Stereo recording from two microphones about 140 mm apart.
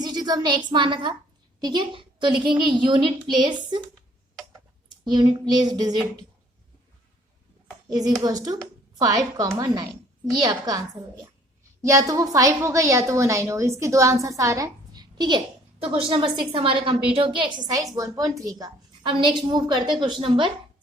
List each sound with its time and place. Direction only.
0.0 s a sound: 30° right (ahead or behind)
0.7 s a woman's voice: 35° right (ahead or behind)
4.9 s a woman's voice: 30° right (ahead or behind)
7.9 s a woman's voice: 25° right (ahead or behind)
15.8 s a woman's voice: 45° right (ahead or behind)